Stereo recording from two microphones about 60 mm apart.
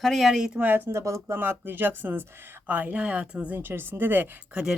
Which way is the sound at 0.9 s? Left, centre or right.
Right.